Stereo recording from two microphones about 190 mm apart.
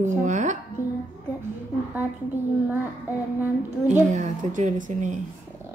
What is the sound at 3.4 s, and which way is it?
Speech, 10° right (ahead or behind).